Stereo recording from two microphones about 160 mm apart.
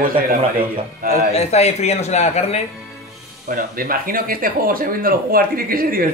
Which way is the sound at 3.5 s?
65° right (ahead or behind).